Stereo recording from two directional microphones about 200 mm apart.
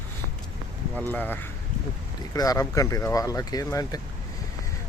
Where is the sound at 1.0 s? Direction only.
10° left (ahead or behind).